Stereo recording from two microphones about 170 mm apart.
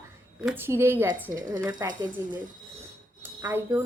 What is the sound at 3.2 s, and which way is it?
Speech, 10° right (ahead or behind).